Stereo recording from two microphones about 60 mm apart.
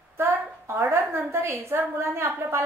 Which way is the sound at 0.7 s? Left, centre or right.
Right.